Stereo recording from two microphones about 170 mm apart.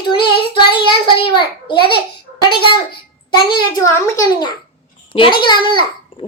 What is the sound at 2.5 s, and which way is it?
A child's voice, 30° left (ahead or behind).